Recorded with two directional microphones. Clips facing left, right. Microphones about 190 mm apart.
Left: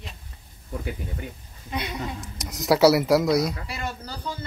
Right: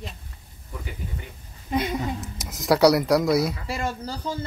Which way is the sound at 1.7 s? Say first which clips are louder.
Right 6 dB; 45° right (ahead or behind).